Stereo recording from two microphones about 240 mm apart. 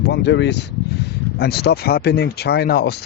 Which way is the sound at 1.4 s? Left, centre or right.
Left.